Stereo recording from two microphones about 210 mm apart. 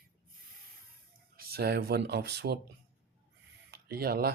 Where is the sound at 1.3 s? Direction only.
50° right (ahead or behind).